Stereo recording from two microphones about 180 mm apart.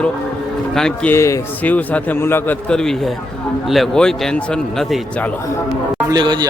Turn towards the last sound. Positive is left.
turn(degrees=-25)  # may be behind; listen again after turning